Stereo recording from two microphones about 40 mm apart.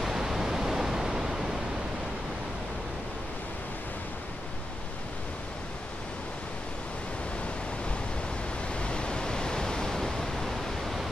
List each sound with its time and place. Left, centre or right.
0.0 s pink noise: centre
8.7 s pink noise: left; by 11.0 s centre